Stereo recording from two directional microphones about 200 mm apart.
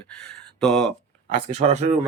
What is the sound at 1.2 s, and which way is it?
Speech, 30° right (ahead or behind).